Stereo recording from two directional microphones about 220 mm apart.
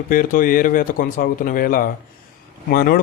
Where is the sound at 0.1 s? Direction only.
40° left (ahead or behind).